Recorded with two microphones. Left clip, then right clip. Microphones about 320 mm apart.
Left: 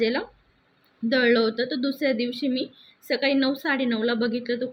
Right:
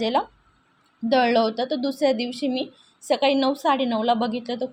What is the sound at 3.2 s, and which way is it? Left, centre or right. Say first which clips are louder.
A woman's voice: right 3 dB; right.